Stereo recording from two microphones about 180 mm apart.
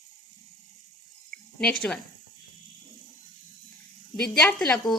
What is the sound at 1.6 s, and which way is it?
Speech, 5° left (ahead or behind).